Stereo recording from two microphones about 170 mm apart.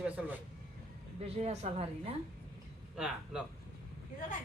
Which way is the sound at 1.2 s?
35° right (ahead or behind).